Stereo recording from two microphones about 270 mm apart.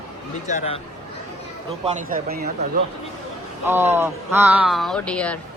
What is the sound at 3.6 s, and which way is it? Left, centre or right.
Speech, centre.